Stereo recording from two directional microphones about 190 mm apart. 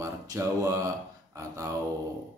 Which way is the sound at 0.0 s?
15° right (ahead or behind).